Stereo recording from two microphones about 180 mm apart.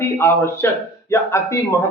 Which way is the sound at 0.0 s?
15° left (ahead or behind).